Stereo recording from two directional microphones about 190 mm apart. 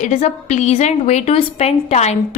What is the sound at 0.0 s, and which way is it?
A woman's voice, 35° left (ahead or behind).